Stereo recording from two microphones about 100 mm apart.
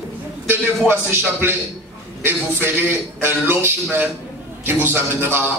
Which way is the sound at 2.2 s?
20° right (ahead or behind).